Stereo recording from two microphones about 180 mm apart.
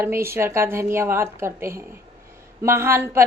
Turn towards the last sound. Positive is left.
turn(degrees=-15)  # may be behind; listen again after turning